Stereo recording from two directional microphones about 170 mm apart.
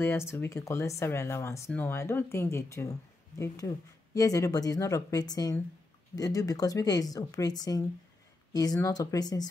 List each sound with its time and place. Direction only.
0.0 s speech: 15° left (ahead or behind)